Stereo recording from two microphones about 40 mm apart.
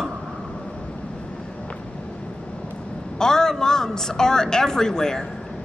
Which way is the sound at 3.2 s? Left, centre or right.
Centre.